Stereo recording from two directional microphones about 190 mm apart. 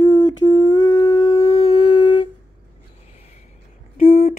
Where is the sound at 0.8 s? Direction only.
20° left (ahead or behind).